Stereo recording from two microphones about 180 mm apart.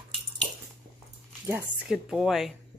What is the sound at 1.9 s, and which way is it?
Speech, 5° right (ahead or behind).